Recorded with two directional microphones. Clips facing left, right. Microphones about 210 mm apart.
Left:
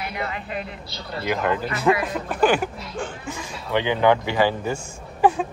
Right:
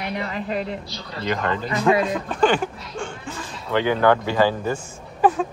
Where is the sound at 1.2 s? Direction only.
10° left (ahead or behind).